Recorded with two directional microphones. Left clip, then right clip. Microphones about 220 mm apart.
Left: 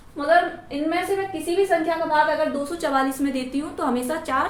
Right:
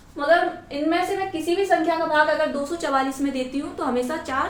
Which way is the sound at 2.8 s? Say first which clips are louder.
Left 1 dB; 20° left (ahead or behind).